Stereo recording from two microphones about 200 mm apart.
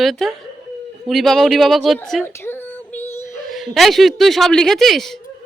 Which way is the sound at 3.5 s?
Centre (ahead or behind).